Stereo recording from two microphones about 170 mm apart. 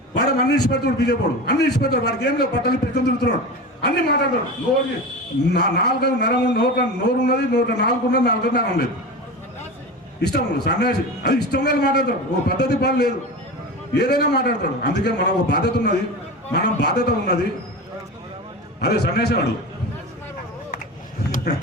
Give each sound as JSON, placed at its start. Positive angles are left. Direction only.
{"t": 0.1, "sound": "a man's voice", "side_deg": 75}
{"t": 5.5, "sound": "a man's voice", "side_deg": 80}
{"t": 10.2, "sound": "a man's voice", "side_deg": 80}
{"t": 18.8, "sound": "a man's voice", "side_deg": 70}